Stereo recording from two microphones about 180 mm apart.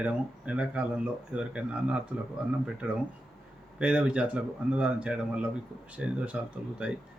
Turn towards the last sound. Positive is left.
turn(degrees=-5)  # may be behind; listen again after turning